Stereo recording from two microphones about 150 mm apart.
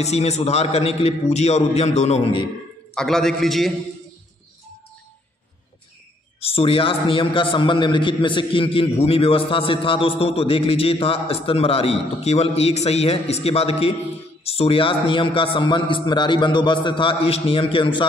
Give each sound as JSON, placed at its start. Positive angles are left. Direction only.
{"t": 0.0, "sound": "a man's voice", "side_deg": 45}
{"t": 2.9, "sound": "a man's voice", "side_deg": 5}
{"t": 6.4, "sound": "a man's voice", "side_deg": 40}